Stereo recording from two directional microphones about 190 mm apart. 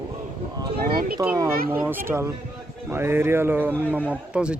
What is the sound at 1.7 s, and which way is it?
Speech, 10° right (ahead or behind).